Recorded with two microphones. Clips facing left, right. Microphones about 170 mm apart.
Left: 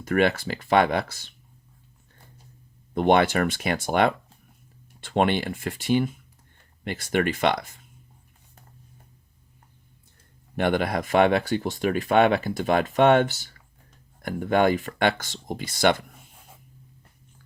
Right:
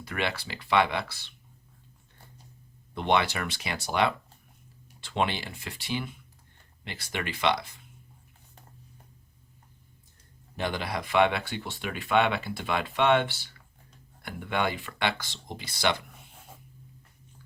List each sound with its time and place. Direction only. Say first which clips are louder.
0.0 s speech: left 10 dB; 45° left (ahead or behind)
2.9 s speech: left 7 dB; 50° left (ahead or behind)
10.6 s speech: left 8 dB; 55° left (ahead or behind)